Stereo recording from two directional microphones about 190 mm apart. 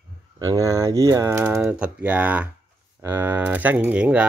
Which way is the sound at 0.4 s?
15° right (ahead or behind).